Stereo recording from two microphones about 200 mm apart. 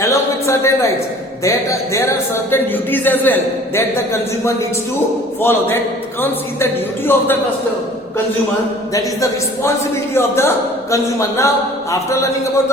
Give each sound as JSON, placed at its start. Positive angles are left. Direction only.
{"t": 0.0, "sound": "a man's voice", "side_deg": 15}
{"t": 8.9, "sound": "a man's voice", "side_deg": 15}